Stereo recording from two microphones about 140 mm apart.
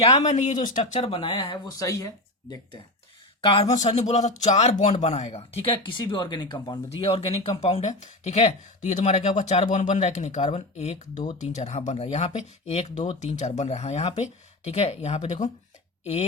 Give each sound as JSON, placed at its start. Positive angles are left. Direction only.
{"t": 0.0, "sound": "speech", "side_deg": 50}
{"t": 0.8, "sound": "speech", "side_deg": 45}
{"t": 1.7, "sound": "speech", "side_deg": 25}
{"t": 3.4, "sound": "speech", "side_deg": 40}
{"t": 3.8, "sound": "speech", "side_deg": 55}
{"t": 7.0, "sound": "speech", "side_deg": 45}